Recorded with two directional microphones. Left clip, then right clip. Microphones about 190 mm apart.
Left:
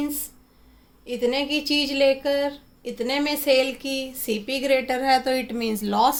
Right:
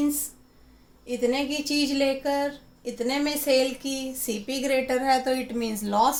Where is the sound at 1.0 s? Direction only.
45° left (ahead or behind).